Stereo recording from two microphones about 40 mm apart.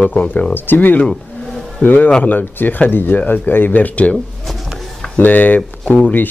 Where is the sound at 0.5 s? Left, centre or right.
Left.